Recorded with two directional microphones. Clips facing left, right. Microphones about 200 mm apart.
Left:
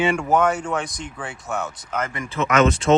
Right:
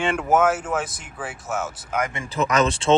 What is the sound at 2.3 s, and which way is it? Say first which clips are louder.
Speech: left 3 dB; 35° right (ahead or behind).